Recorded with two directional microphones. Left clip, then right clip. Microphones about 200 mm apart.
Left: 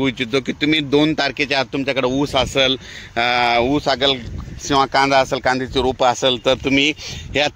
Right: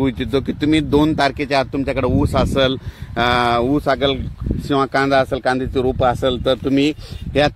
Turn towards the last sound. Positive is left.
turn(degrees=-35)  # may be behind; listen again after turning